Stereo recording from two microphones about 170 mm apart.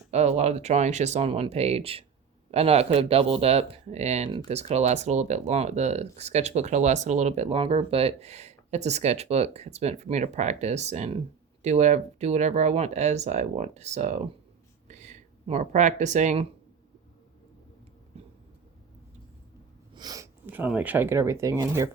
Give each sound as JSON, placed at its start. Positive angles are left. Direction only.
{"t": 0.1, "sound": "speech", "side_deg": -40}
{"t": 19.9, "sound": "speech", "side_deg": -25}